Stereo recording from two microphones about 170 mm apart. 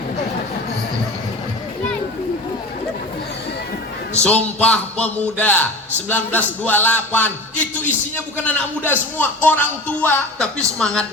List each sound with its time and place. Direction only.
4.2 s a man's voice: 5° left (ahead or behind)